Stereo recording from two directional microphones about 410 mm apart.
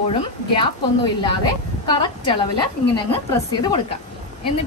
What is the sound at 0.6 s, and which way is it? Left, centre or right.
A woman's voice, centre.